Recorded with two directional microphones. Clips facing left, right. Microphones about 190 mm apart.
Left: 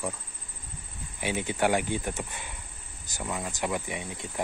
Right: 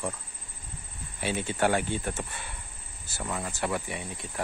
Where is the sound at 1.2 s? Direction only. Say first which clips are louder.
Even; 15° left (ahead or behind).